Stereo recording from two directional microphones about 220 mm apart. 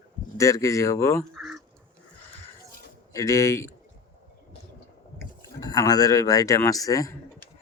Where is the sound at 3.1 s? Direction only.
15° left (ahead or behind).